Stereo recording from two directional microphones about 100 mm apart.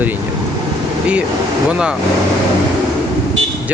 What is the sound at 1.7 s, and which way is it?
Speech, 10° right (ahead or behind).